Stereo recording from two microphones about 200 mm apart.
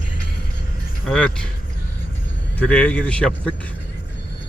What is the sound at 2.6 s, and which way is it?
Speech, 5° left (ahead or behind).